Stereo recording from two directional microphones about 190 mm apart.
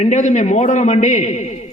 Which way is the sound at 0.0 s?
40° left (ahead or behind).